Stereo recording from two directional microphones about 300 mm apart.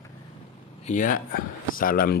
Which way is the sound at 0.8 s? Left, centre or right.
Left.